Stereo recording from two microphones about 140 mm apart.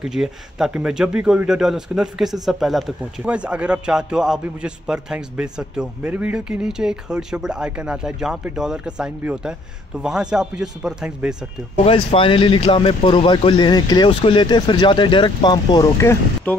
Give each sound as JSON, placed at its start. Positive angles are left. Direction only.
{"t": 0.0, "sound": "a man's voice", "side_deg": -5}
{"t": 11.8, "sound": "speech", "side_deg": 40}
{"t": 16.0, "sound": "speech", "side_deg": 20}